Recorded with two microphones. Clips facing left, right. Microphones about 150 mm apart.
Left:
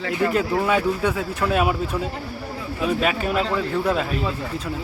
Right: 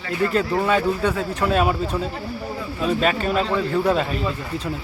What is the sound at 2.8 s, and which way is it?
A man's voice, 5° left (ahead or behind).